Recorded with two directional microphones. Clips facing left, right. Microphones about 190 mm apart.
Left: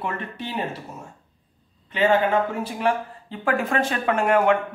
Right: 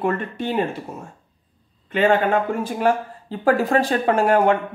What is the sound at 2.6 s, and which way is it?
Speech, 40° right (ahead or behind).